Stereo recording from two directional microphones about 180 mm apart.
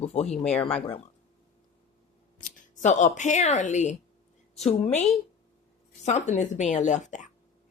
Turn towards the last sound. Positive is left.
turn(degrees=45)  # may be behind; listen again after turning